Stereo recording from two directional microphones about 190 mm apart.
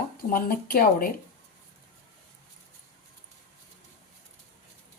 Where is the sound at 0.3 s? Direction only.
50° left (ahead or behind).